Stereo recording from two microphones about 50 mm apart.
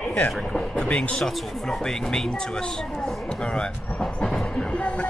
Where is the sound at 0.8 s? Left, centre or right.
Left.